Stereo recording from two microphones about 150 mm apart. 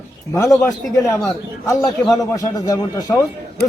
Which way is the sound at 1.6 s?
20° left (ahead or behind).